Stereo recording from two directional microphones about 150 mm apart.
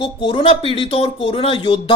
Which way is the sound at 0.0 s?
35° left (ahead or behind).